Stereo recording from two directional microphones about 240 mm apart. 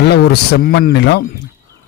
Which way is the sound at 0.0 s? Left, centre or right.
Left.